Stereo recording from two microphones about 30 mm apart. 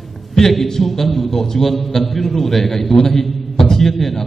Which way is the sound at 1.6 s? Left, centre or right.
Centre.